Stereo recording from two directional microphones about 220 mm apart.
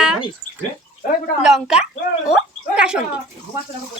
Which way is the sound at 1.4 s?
5° right (ahead or behind).